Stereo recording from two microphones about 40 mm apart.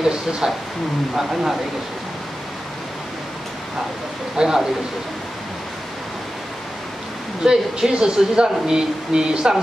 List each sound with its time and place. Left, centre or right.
0.0 s speech: centre
4.4 s speech: centre
7.4 s speech: centre